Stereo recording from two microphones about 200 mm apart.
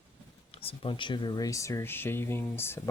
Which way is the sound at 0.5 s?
30° left (ahead or behind).